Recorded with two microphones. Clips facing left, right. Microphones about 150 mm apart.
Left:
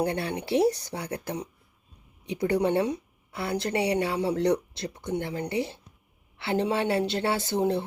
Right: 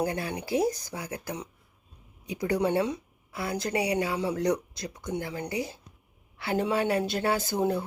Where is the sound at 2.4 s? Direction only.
30° left (ahead or behind).